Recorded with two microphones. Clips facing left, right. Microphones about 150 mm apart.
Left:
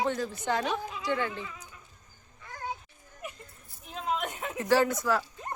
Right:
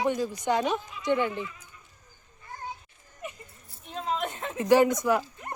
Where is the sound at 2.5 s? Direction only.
90° left.